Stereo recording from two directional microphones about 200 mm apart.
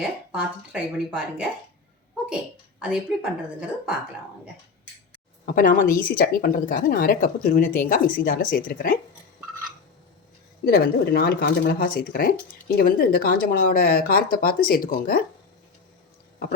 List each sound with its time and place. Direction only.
0.0 s a woman's voice: 5° right (ahead or behind)
5.5 s speech: 45° left (ahead or behind)
10.7 s speech: 50° left (ahead or behind)